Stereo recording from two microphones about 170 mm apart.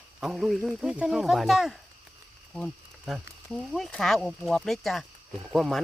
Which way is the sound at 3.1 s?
Centre (ahead or behind).